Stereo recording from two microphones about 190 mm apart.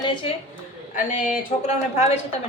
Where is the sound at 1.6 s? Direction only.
35° left (ahead or behind).